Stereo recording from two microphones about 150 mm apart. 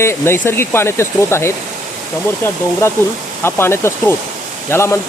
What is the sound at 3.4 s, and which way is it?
Speech, 15° left (ahead or behind).